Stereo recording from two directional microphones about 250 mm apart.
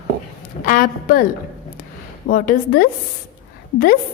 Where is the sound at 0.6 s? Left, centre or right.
Left.